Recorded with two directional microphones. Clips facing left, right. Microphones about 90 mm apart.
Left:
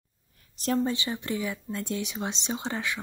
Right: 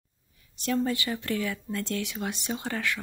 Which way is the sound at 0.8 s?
20° left (ahead or behind).